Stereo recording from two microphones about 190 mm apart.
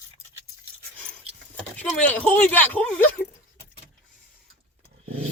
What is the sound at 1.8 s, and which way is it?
Speech, 10° left (ahead or behind).